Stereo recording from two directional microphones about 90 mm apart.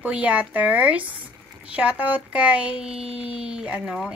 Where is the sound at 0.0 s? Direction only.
15° right (ahead or behind).